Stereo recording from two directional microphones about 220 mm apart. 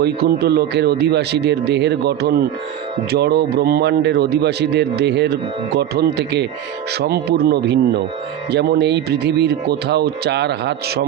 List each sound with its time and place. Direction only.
0.0 s a man's voice: 45° right (ahead or behind)